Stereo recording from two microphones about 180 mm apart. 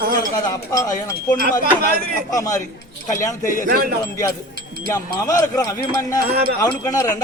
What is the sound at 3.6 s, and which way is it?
Speech, 55° right (ahead or behind).